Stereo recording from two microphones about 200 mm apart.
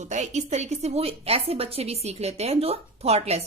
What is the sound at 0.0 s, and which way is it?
A woman's voice, 35° right (ahead or behind).